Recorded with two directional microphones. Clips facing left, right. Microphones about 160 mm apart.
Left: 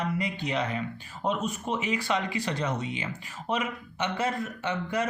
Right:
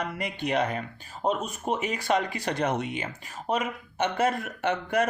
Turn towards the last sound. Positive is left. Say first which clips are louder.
# right 4 dB
turn(degrees=-60)  # may be behind; listen again after turning